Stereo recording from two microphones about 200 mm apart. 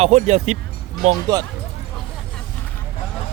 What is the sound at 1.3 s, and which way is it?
Speech, 20° right (ahead or behind).